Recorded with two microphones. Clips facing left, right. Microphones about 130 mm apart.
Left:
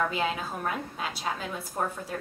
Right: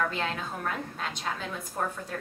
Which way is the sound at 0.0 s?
5° left (ahead or behind).